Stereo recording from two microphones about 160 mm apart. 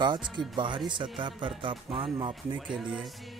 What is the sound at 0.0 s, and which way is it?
Speech, 30° right (ahead or behind).